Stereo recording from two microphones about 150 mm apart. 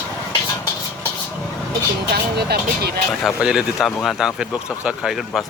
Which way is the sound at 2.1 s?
90° right.